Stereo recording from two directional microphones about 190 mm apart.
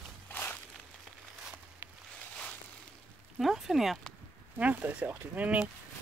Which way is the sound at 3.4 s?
Centre (ahead or behind).